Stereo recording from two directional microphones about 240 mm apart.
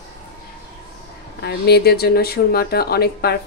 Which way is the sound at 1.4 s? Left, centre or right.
Left.